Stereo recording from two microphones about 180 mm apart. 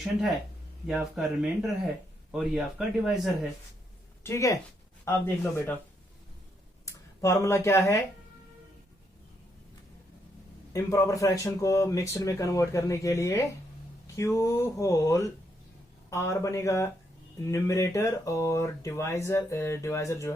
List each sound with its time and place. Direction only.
0.9 s speech: 5° right (ahead or behind)
4.2 s speech: 15° left (ahead or behind)
6.8 s speech: 15° left (ahead or behind)
10.7 s speech: 15° left (ahead or behind)